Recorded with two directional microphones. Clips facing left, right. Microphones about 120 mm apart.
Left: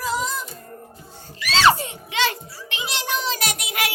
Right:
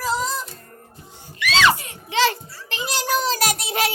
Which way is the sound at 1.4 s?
35° left (ahead or behind).